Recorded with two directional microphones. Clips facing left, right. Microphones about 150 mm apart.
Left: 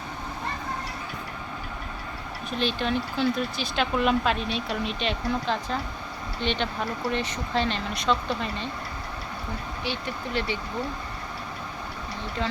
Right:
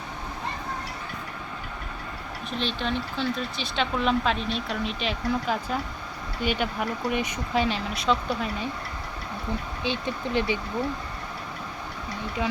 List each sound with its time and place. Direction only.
2.6 s speech: 5° left (ahead or behind)
9.8 s speech: 20° right (ahead or behind)